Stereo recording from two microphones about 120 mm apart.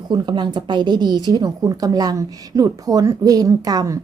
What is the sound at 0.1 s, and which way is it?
A woman's voice, 40° right (ahead or behind).